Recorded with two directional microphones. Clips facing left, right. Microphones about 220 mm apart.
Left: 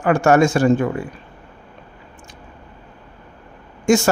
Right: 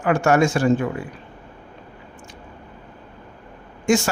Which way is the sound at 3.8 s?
45° left (ahead or behind).